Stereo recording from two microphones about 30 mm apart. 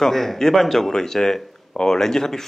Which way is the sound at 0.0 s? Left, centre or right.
Centre.